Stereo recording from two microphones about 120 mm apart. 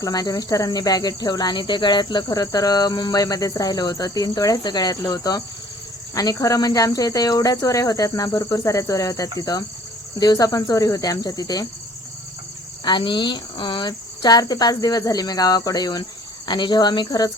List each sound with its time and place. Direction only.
0.0 s cricket: 30° left (ahead or behind)
6.1 s speech: 30° left (ahead or behind)
9.4 s cricket: 30° left (ahead or behind)
12.8 s cricket: 40° left (ahead or behind)